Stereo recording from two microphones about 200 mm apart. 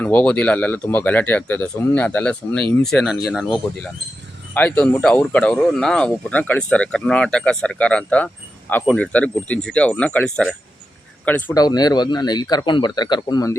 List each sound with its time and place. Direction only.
0.0 s speech: 10° left (ahead or behind)
11.5 s speech: 20° left (ahead or behind)